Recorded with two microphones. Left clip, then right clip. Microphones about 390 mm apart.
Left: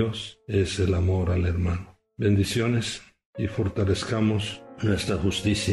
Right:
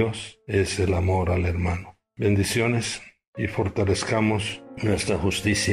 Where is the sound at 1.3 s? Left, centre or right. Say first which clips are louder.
Right 3 dB; centre.